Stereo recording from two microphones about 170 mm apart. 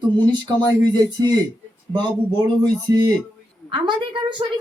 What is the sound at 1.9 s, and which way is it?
A child's voice, 25° right (ahead or behind).